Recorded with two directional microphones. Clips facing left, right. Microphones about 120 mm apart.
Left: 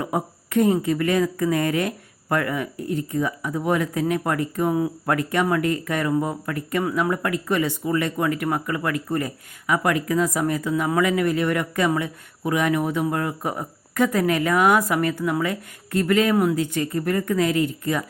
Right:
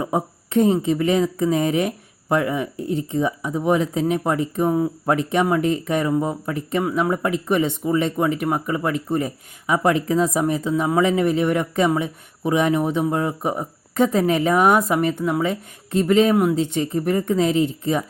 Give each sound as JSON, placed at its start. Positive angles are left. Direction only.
{"t": 0.0, "sound": "speech", "side_deg": -25}